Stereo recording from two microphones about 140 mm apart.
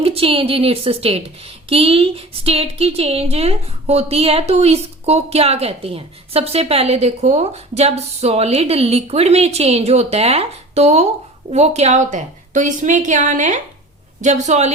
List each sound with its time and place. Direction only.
0.0 s a woman's voice: 45° right (ahead or behind)